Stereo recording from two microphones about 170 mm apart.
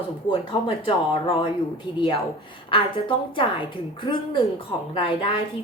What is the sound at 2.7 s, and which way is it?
A woman's voice, 30° left (ahead or behind).